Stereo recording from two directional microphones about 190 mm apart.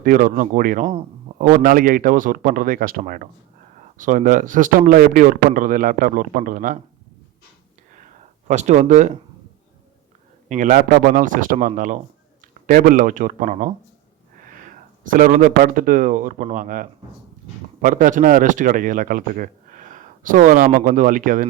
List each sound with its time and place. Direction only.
0.0 s a man's voice: 45° right (ahead or behind)
8.4 s speech: 40° right (ahead or behind)
10.5 s a man's voice: 45° right (ahead or behind)
15.0 s a man's voice: 45° right (ahead or behind)